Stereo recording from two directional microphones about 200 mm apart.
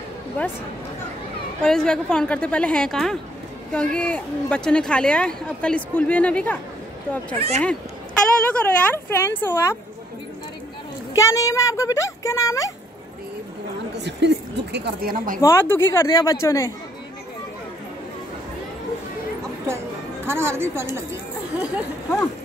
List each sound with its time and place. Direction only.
1.6 s speech: 5° left (ahead or behind)
7.3 s speech: 30° right (ahead or behind)
8.5 s speech: 10° left (ahead or behind)
11.1 s speech: 15° left (ahead or behind)
13.9 s a woman's voice: 60° right (ahead or behind)
15.4 s speech: 10° left (ahead or behind)
20.2 s speech: 10° right (ahead or behind)